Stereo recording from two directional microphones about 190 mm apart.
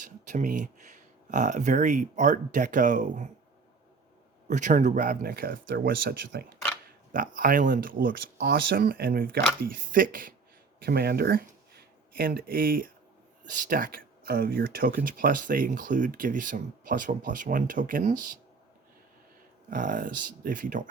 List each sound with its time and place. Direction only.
0.0 s speech: 45° right (ahead or behind)
4.4 s speech: 40° right (ahead or behind)
19.7 s speech: 45° right (ahead or behind)